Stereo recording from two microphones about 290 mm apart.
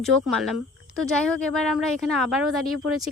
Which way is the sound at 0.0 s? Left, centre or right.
Centre.